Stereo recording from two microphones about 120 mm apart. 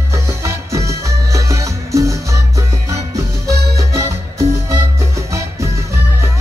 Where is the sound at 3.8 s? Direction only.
25° right (ahead or behind).